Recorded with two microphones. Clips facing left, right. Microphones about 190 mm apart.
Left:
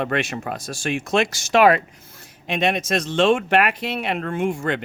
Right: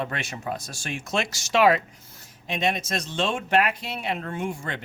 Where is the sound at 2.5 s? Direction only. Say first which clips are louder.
Left 5 dB; 75° left (ahead or behind).